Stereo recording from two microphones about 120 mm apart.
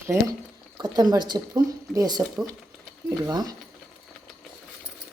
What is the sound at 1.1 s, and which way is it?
Speech, 35° right (ahead or behind).